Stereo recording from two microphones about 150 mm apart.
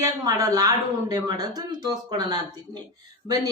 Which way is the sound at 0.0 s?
25° right (ahead or behind).